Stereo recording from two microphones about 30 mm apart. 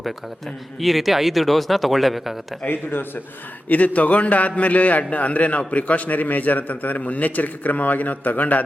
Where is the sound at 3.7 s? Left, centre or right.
Left.